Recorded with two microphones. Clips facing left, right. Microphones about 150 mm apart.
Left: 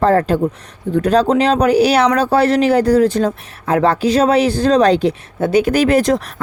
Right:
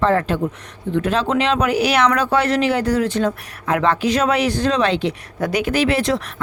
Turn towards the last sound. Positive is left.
turn(degrees=40)  # may be behind; listen again after turning